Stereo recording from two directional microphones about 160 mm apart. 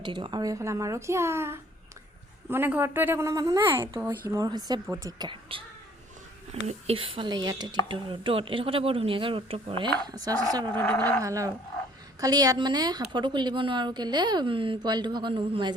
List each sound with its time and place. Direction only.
0.0 s a woman's voice: 30° right (ahead or behind)
4.0 s a woman's voice: 15° right (ahead or behind); by 5.6 s 35° right (ahead or behind)
6.7 s a woman's voice: 40° right (ahead or behind)
10.8 s speech: 10° left (ahead or behind)
11.2 s a woman's voice: 20° right (ahead or behind)